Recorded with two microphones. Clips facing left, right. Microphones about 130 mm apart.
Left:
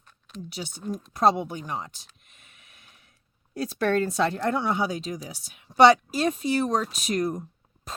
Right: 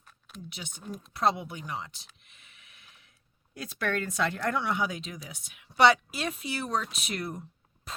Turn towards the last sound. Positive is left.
turn(degrees=40)  # may be behind; listen again after turning